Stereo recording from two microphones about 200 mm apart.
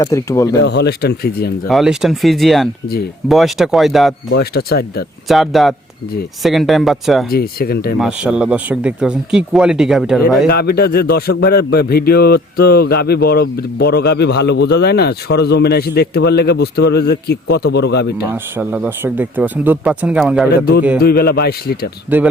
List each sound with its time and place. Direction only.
0.0 s speech: 15° left (ahead or behind)
0.6 s speech: 60° left (ahead or behind)
1.6 s speech: centre (ahead or behind)
4.3 s a man's voice: 55° left (ahead or behind)
5.3 s speech: centre (ahead or behind)
7.3 s a man's voice: 50° left (ahead or behind)
7.9 s speech: 5° right (ahead or behind)
10.5 s a man's voice: 50° left (ahead or behind)
18.3 s speech: 10° right (ahead or behind)
21.0 s a man's voice: 50° left (ahead or behind)
22.1 s speech: 10° right (ahead or behind)